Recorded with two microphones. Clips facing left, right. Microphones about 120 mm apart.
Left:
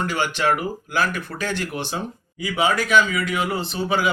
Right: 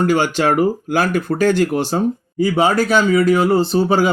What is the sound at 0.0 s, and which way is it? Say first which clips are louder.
Speech: right 7 dB; 40° right (ahead or behind).